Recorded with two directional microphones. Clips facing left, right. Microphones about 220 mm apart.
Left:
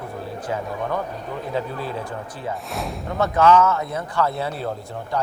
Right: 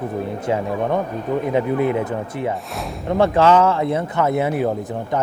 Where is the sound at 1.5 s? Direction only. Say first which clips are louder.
Right 8 dB; 20° right (ahead or behind).